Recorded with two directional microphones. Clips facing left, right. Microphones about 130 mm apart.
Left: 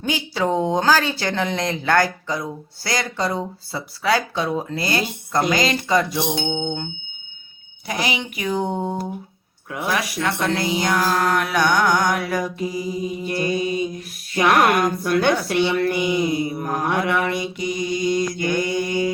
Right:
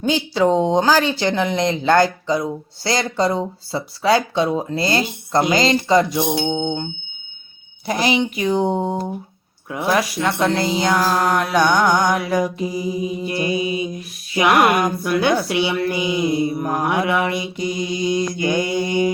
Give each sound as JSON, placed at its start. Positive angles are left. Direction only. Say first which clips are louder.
{"t": 0.0, "sound": "a woman's voice", "louder": "right 5 dB", "side_deg": -20}
{"t": 6.6, "sound": "mantra", "louder": "right 3 dB", "side_deg": -15}
{"t": 7.9, "sound": "a woman's voice", "louder": "right 6 dB", "side_deg": -35}
{"t": 8.2, "sound": "a woman's voice", "louder": "right 5 dB", "side_deg": -25}
{"t": 16.6, "sound": "mantra", "louder": "right 2 dB", "side_deg": -15}
{"t": 17.7, "sound": "a woman's voice", "louder": "even", "side_deg": -25}